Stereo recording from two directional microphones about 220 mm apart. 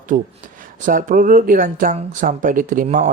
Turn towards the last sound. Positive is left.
turn(degrees=-35)  # may be behind; listen again after turning